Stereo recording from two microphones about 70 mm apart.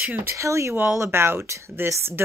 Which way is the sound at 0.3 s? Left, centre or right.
Right.